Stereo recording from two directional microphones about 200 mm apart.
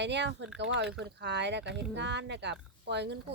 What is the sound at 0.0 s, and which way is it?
Speech, 60° right (ahead or behind).